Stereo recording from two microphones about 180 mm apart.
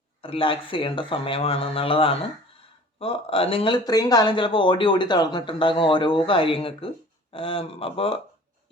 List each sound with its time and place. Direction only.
0.2 s speech: 30° left (ahead or behind)